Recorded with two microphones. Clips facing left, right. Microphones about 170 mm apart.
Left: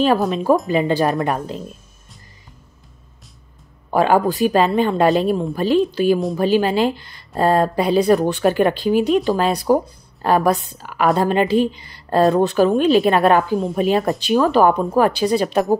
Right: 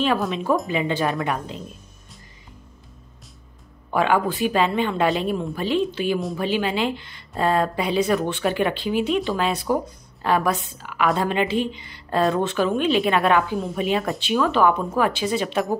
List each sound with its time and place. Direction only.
0.3 s speech: 35° left (ahead or behind)
3.9 s speech: 40° left (ahead or behind)